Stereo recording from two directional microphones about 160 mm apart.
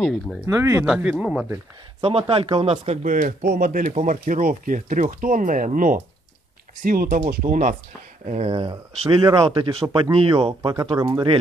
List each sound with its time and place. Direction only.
0.0 s speech: centre (ahead or behind)
0.5 s speech: 20° right (ahead or behind)
0.8 s speech: 5° right (ahead or behind)
2.0 s speech: 35° right (ahead or behind)
3.4 s speech: 65° right (ahead or behind)
3.9 s speech: 50° right (ahead or behind)
8.3 s speech: 40° right (ahead or behind)